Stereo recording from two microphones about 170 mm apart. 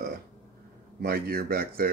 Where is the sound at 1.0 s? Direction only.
60° right (ahead or behind).